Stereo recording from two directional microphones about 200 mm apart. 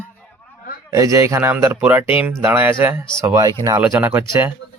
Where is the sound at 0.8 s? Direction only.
15° right (ahead or behind).